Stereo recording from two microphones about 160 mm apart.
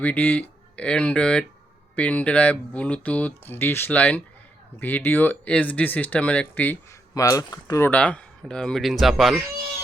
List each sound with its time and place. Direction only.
0.0 s speech: 10° left (ahead or behind)
7.1 s speech: 20° left (ahead or behind)
7.9 s speech: 10° left (ahead or behind)